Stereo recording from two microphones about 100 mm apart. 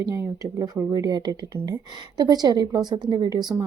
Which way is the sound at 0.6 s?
40° right (ahead or behind).